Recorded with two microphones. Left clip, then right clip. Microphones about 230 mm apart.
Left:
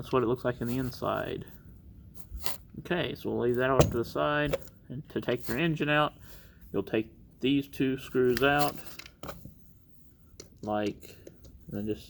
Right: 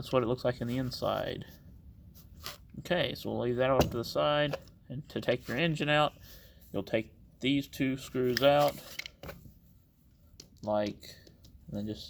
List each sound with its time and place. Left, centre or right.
0.0 s speech: right
2.8 s speech: right
10.6 s speech: right